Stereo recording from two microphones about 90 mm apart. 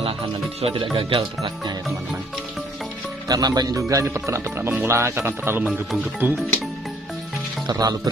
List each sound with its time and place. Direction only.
0.9 s speech: 85° right
3.3 s speech: 45° right (ahead or behind); by 6.4 s 20° right (ahead or behind)
7.6 s speech: 50° right (ahead or behind)